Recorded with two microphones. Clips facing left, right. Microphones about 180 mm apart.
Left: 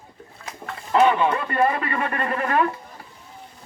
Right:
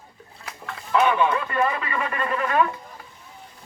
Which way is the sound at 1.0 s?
35° left (ahead or behind).